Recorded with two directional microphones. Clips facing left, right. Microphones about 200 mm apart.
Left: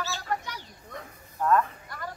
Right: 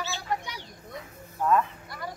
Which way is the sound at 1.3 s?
5° right (ahead or behind).